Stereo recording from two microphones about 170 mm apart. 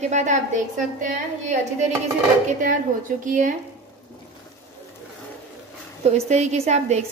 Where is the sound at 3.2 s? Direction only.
50° right (ahead or behind).